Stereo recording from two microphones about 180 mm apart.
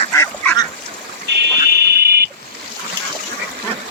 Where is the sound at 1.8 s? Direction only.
65° right (ahead or behind).